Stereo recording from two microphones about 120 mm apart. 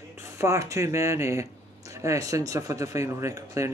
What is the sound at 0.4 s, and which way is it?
Speech, 25° right (ahead or behind).